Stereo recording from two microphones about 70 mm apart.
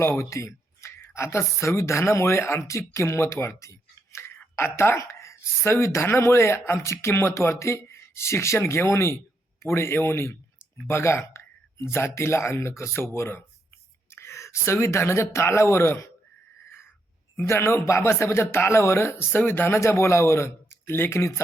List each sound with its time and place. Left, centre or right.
0.2 s speech: left
17.3 s a man's voice: left
17.8 s speech: left